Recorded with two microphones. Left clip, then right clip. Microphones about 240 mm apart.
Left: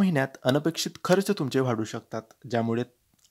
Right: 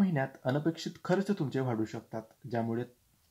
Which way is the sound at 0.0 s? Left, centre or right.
Left.